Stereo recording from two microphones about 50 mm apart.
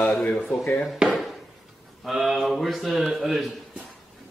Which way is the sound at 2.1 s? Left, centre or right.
Centre.